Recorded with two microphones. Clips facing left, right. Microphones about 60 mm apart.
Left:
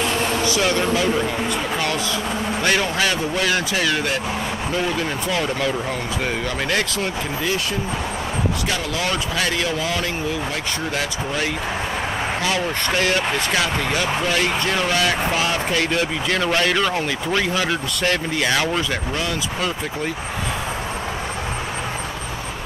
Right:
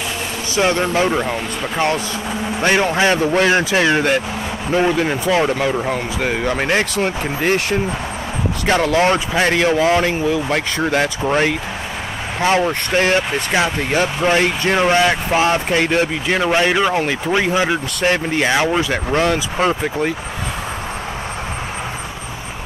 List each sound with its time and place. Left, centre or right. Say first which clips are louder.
0.6 s speech: right 7 dB; right
2.6 s speech: right 6 dB; right
8.6 s speech: right 9 dB; right
18.9 s speech: right 7 dB; right